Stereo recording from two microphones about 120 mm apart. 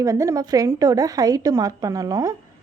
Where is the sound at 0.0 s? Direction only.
25° right (ahead or behind).